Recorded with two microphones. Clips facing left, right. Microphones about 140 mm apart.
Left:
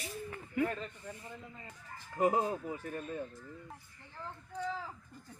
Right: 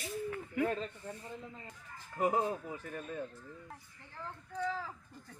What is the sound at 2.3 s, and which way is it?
Speech, 15° left (ahead or behind).